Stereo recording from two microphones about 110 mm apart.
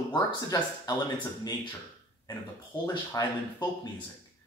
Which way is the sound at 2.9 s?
40° left (ahead or behind).